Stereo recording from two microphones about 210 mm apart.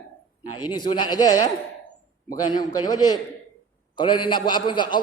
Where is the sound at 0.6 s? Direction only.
20° left (ahead or behind).